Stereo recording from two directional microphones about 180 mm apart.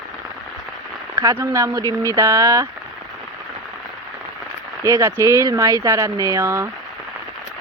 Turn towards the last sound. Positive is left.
turn(degrees=-15)  # may be behind; listen again after turning